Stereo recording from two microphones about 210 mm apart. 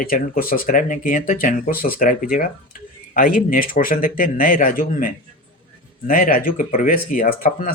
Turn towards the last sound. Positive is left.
turn(degrees=45)  # may be behind; listen again after turning